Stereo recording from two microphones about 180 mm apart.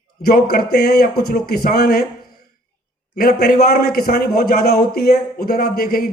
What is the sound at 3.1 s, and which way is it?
A man's voice, 55° left (ahead or behind).